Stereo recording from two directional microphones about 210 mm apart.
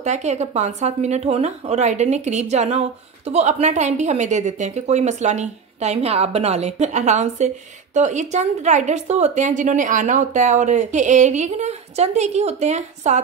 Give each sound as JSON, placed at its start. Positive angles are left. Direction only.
{"t": 0.0, "sound": "a woman's voice", "side_deg": -35}